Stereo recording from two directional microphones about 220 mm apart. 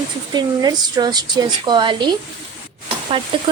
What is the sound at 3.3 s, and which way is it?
Speech, 25° right (ahead or behind).